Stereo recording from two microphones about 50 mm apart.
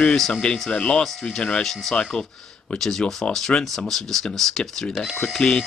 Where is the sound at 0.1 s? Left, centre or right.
Centre.